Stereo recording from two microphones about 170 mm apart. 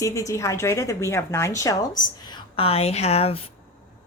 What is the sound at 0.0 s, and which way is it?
A woman's voice, 15° left (ahead or behind).